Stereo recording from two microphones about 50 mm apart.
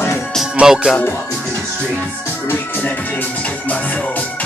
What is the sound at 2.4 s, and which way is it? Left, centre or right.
Music, left.